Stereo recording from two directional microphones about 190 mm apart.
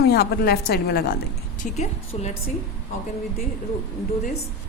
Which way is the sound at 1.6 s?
35° left (ahead or behind).